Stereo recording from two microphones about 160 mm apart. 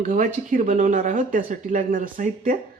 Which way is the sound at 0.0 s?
50° right (ahead or behind).